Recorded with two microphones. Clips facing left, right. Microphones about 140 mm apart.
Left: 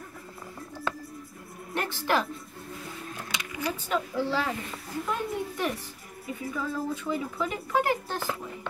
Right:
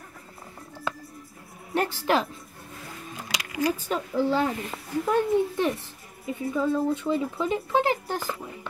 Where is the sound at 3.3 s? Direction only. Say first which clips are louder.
Right 7 dB; 90° right.